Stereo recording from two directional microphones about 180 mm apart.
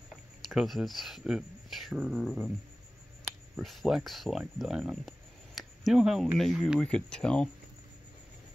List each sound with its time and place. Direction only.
0.1 s speech: centre (ahead or behind)
3.5 s speech: centre (ahead or behind)